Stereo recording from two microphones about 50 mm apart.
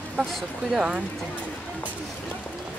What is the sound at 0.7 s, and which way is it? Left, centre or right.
Speech, centre.